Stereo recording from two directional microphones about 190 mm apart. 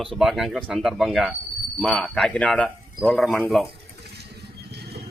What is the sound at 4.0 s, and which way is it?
Vehicle, 60° right (ahead or behind).